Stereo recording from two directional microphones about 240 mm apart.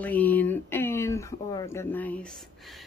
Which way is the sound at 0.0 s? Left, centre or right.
Centre.